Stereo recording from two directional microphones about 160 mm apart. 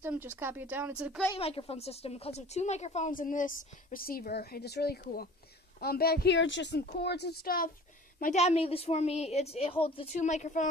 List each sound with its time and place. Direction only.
0.0 s speech: 15° right (ahead or behind)
1.3 s a woman's voice: 35° left (ahead or behind); by 7.7 s 65° left (ahead or behind)
8.2 s a woman's voice: 45° left (ahead or behind)
10.2 s a woman's voice: 50° left (ahead or behind)